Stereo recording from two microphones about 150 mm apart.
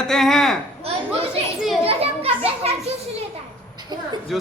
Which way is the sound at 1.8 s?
40° right (ahead or behind).